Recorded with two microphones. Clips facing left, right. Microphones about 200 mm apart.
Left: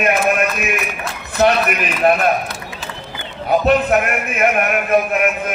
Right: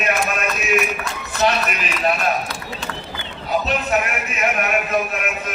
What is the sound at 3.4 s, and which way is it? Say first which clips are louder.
Speech: left 8 dB; 55° left (ahead or behind).